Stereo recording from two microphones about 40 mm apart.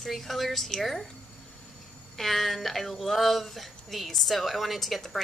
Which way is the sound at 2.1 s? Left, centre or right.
Centre.